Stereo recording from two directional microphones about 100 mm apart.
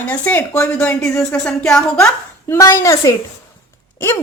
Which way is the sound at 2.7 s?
30° left (ahead or behind).